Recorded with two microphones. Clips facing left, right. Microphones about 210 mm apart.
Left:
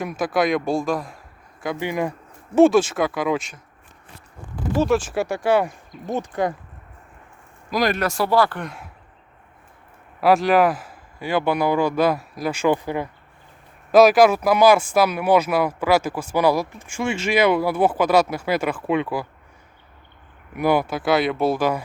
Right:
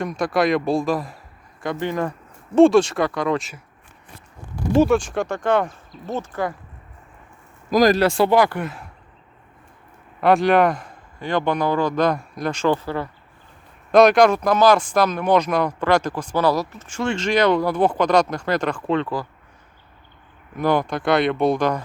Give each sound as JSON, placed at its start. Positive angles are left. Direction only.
{"t": 0.0, "sound": "speech", "side_deg": 5}
{"t": 1.8, "sound": "speech", "side_deg": 10}
{"t": 4.9, "sound": "speech", "side_deg": 5}
{"t": 7.7, "sound": "speech", "side_deg": -40}
{"t": 10.2, "sound": "speech", "side_deg": 0}
{"t": 13.9, "sound": "speech", "side_deg": 5}
{"t": 20.6, "sound": "speech", "side_deg": 10}